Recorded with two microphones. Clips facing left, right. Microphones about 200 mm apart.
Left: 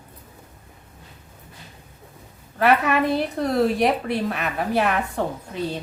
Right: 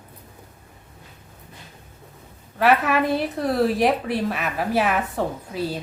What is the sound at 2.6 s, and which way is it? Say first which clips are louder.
A woman's voice: even; centre (ahead or behind).